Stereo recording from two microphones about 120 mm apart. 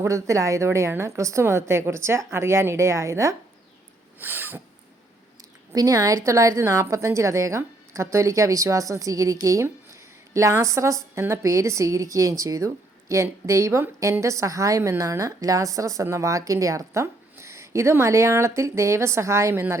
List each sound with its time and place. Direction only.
0.0 s a woman's voice: 25° right (ahead or behind)
4.2 s a sound: 15° right (ahead or behind)
5.7 s a woman's voice: 30° right (ahead or behind)